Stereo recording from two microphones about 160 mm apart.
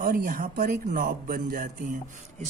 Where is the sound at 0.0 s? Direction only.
65° right (ahead or behind).